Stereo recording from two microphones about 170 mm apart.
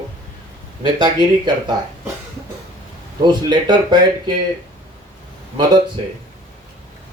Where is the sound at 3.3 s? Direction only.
25° right (ahead or behind).